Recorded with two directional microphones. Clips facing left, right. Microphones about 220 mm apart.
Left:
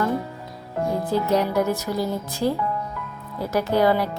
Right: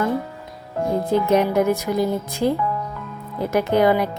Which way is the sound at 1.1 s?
20° right (ahead or behind).